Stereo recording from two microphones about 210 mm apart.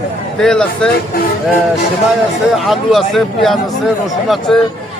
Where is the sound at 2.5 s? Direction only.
Centre (ahead or behind).